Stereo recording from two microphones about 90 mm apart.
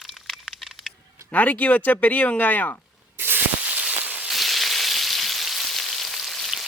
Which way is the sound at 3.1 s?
25° right (ahead or behind).